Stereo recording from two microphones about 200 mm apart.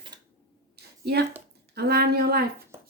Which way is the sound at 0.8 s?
55° right (ahead or behind).